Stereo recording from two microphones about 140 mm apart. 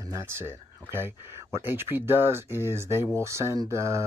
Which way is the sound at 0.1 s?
20° right (ahead or behind).